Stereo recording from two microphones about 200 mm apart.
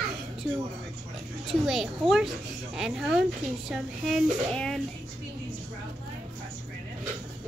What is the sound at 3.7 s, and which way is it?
Speech, centre (ahead or behind).